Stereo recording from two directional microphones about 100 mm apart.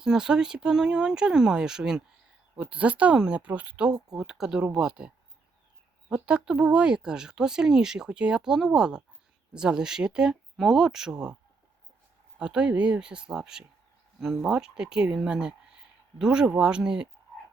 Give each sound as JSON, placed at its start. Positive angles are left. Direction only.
{"t": 0.0, "sound": "speech", "side_deg": -5}
{"t": 12.4, "sound": "speech", "side_deg": -10}